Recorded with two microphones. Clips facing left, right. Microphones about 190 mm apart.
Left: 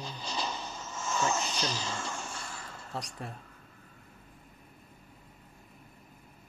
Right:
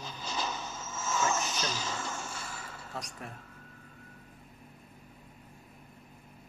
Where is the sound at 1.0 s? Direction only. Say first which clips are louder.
Even; 5° right (ahead or behind).